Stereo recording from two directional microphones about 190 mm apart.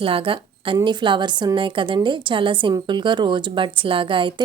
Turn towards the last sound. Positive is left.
turn(degrees=-25)  # may be behind; listen again after turning